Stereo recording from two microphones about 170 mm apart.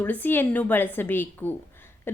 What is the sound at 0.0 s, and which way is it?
A woman's voice, 10° left (ahead or behind).